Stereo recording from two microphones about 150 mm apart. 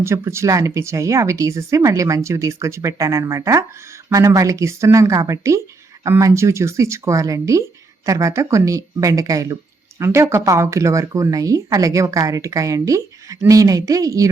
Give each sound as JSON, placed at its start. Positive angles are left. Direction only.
{"t": 0.0, "sound": "speech", "side_deg": -15}